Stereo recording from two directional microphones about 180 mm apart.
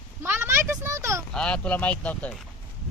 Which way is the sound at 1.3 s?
5° left (ahead or behind).